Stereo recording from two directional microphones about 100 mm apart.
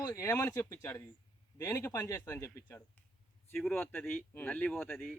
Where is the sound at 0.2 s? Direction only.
25° left (ahead or behind).